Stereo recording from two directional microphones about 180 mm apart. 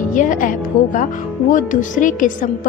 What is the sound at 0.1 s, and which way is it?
A woman's voice, 45° left (ahead or behind).